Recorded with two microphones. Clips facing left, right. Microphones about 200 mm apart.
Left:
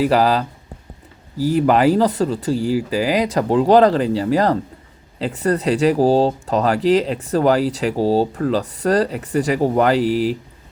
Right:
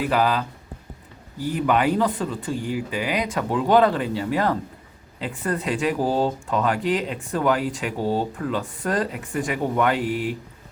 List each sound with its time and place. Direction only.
0.1 s speech: 35° left (ahead or behind)